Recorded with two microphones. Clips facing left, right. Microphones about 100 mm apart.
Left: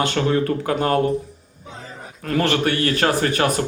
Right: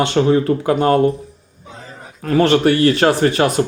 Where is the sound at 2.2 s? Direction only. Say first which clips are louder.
Right 7 dB; 30° right (ahead or behind).